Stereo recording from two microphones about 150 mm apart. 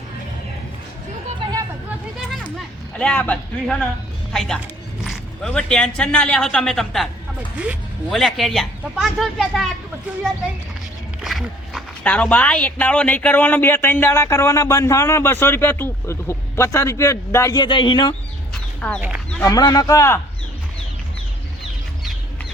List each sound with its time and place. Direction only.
2.3 s a sound: centre (ahead or behind)
2.9 s speech: 10° left (ahead or behind)
8.1 s speech: centre (ahead or behind)
11.2 s a sound: centre (ahead or behind)
12.0 s speech: 10° left (ahead or behind); by 18.1 s 30° left (ahead or behind)
18.8 s speech: 5° left (ahead or behind)
19.4 s a man's voice: 25° left (ahead or behind)